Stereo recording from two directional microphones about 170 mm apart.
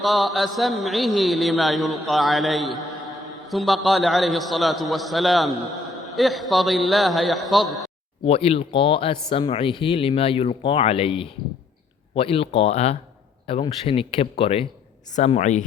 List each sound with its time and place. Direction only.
0.0 s a man's voice: centre (ahead or behind)
8.2 s speech: 35° left (ahead or behind)